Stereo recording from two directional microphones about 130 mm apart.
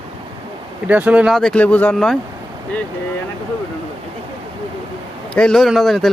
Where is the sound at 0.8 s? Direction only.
10° right (ahead or behind).